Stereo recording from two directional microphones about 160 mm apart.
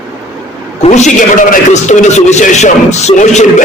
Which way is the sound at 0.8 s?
45° left (ahead or behind).